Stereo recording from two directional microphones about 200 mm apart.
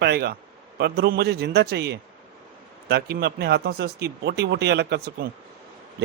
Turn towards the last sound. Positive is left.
turn(degrees=-55)  # may be behind; listen again after turning